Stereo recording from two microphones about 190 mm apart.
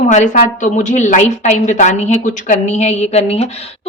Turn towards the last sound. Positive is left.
turn(degrees=30)  # may be behind; listen again after turning